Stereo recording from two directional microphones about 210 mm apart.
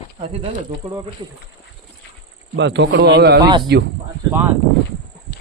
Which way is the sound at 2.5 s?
60° right (ahead or behind).